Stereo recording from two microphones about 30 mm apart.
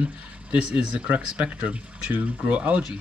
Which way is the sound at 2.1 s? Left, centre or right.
Right.